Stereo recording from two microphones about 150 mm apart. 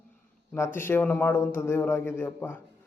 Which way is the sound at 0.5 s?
15° left (ahead or behind).